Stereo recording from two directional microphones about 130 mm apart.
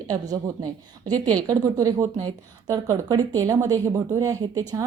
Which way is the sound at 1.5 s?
25° right (ahead or behind).